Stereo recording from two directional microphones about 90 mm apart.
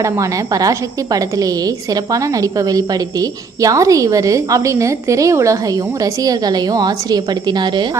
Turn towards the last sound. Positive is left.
turn(degrees=-55)  # may be behind; listen again after turning